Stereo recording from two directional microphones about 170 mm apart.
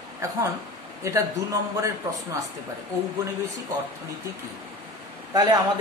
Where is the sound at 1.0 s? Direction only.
20° right (ahead or behind).